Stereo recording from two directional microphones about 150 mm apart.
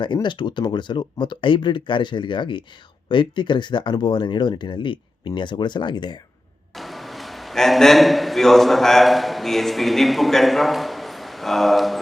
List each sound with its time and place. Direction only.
0.0 s speech: 30° left (ahead or behind)
6.7 s a man's voice: centre (ahead or behind)